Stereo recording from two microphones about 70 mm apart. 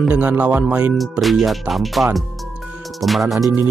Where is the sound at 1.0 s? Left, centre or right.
Centre.